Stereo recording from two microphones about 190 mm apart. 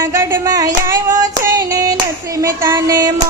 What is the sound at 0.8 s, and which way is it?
Child singing, 15° right (ahead or behind).